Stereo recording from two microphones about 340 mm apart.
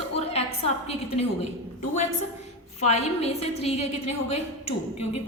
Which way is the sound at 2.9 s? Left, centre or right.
Centre.